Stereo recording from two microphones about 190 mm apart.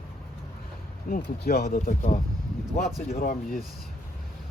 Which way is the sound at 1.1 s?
45° left (ahead or behind).